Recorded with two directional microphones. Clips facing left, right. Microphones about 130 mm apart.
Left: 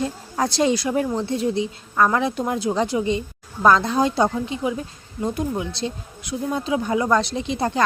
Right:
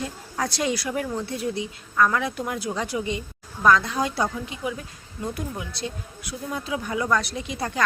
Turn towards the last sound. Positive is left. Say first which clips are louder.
# left 6 dB
turn(degrees=30)  # may be behind; listen again after turning